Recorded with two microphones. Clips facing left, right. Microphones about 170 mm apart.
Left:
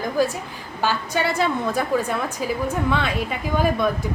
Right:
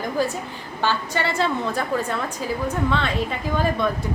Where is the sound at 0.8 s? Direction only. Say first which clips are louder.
Left 1 dB; 10° left (ahead or behind).